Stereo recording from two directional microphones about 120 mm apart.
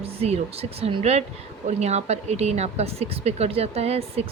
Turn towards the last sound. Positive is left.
turn(degrees=-60)  # may be behind; listen again after turning